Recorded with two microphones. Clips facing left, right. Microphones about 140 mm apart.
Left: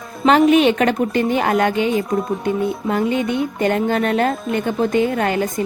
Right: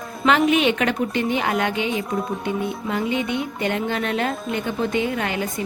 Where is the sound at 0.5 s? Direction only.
40° left (ahead or behind).